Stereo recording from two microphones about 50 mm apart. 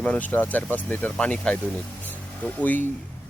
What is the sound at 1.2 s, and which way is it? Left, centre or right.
Speech, left.